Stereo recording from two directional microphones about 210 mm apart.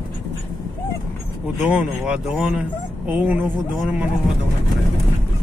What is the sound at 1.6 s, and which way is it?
Speech, 5° right (ahead or behind).